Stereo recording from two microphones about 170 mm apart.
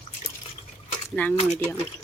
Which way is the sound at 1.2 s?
10° left (ahead or behind).